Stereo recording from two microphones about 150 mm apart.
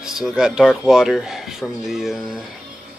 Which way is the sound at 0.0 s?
5° right (ahead or behind).